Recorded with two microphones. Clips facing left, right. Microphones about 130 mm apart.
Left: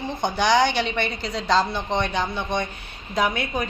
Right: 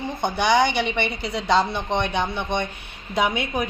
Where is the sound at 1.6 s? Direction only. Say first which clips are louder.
Right 1 dB; 20° right (ahead or behind).